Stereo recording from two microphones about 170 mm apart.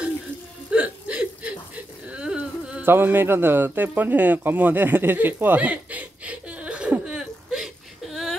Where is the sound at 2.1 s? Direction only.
5° right (ahead or behind).